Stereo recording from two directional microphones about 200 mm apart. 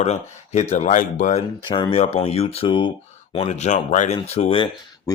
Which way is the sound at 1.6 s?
25° left (ahead or behind).